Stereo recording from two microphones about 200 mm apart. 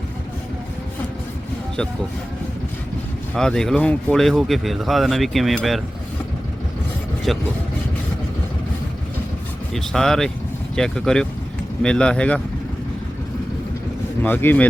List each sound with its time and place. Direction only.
3.3 s speech: 5° left (ahead or behind)
7.3 s speech: centre (ahead or behind)
9.7 s speech: centre (ahead or behind)
14.2 s speech: 10° left (ahead or behind)